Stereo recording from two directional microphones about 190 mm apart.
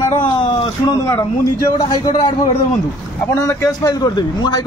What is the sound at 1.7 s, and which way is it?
A man's voice, 20° left (ahead or behind).